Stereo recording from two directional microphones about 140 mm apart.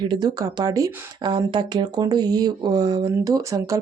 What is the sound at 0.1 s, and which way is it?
Speech, 30° right (ahead or behind).